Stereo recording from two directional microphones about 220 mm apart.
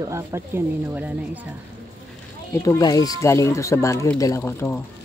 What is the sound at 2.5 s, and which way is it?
Speech, 15° left (ahead or behind).